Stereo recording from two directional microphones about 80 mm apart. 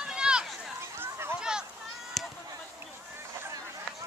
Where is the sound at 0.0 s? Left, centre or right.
Centre.